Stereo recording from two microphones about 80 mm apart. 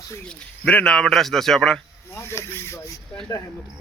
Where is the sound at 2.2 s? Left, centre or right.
Left.